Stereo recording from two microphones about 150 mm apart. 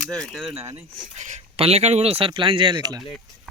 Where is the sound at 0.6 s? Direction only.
20° right (ahead or behind).